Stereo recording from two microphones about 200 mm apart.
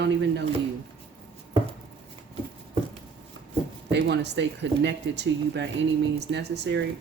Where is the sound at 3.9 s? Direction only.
60° right (ahead or behind).